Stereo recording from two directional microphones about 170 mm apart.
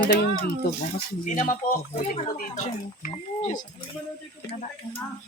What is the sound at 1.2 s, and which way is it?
Speech, 50° left (ahead or behind).